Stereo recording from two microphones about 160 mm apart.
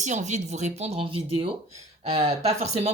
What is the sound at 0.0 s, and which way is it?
Speech, 50° right (ahead or behind).